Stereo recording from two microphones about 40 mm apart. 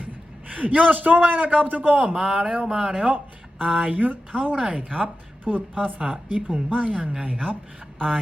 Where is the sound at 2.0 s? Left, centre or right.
Right.